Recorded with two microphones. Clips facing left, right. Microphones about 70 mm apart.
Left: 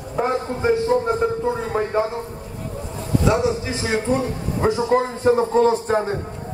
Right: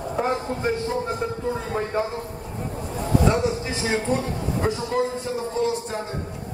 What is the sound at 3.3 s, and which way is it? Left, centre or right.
A man's voice, centre.